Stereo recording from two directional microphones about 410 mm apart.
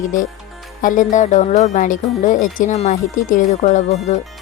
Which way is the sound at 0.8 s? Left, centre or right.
Centre.